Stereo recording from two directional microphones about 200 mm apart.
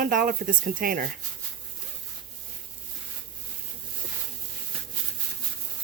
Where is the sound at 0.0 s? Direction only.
45° right (ahead or behind).